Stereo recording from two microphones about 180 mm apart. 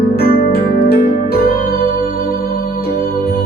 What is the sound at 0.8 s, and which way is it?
Music, 50° left (ahead or behind).